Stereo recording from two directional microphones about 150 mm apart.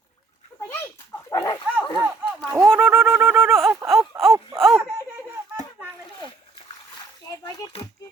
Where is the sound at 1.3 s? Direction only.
25° left (ahead or behind).